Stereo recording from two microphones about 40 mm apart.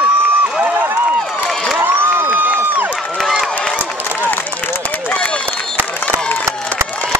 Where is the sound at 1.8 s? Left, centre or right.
Right.